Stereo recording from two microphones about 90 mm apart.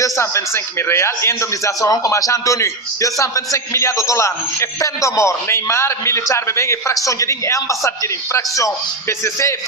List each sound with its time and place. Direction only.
0.0 s a man's voice: 30° left (ahead or behind)